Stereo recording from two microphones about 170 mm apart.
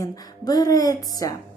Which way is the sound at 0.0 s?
20° left (ahead or behind).